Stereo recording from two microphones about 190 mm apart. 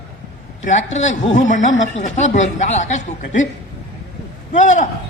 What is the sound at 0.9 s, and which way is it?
A woman's voice, 40° left (ahead or behind).